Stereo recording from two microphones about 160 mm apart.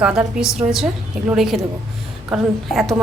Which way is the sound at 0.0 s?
5° right (ahead or behind).